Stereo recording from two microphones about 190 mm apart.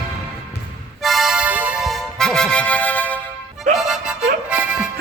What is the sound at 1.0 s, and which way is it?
Music, centre (ahead or behind).